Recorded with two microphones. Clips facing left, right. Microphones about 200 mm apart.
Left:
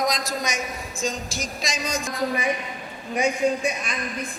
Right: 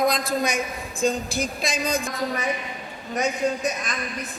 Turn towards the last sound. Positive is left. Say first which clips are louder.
# left 2 dB
turn(degrees=10)  # may be behind; listen again after turning